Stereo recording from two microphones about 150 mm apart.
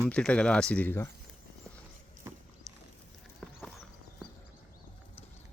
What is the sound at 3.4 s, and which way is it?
Clip-clop, 10° left (ahead or behind).